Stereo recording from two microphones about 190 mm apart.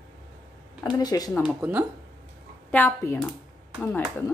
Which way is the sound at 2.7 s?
10° left (ahead or behind).